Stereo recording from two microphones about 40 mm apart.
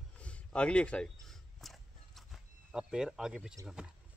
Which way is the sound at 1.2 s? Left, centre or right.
Centre.